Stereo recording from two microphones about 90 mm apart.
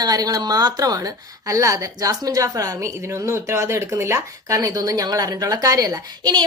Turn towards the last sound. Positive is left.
turn(degrees=-50)  # may be behind; listen again after turning